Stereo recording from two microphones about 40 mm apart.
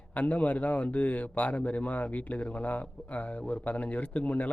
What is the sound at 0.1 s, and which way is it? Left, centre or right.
A man's voice, left.